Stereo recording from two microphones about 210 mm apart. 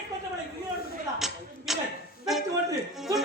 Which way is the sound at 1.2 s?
Centre (ahead or behind).